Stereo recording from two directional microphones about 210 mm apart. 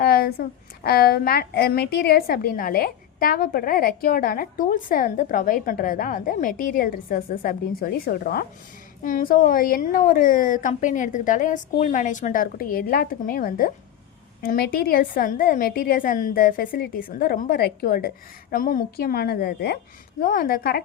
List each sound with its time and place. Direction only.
0.0 s a woman's voice: 45° left (ahead or behind)